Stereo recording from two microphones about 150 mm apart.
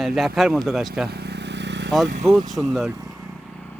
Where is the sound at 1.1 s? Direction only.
90° right.